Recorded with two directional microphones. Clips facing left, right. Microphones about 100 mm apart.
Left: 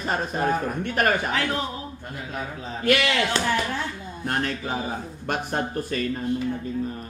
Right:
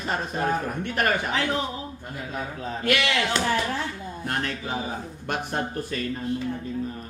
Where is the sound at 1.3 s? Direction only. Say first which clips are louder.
Even; 20° right (ahead or behind).